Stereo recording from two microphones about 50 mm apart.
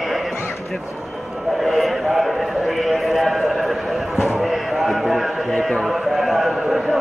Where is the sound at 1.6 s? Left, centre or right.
Centre.